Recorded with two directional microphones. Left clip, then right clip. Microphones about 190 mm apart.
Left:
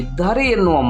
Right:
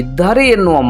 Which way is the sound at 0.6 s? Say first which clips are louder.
Right 4 dB; 5° right (ahead or behind).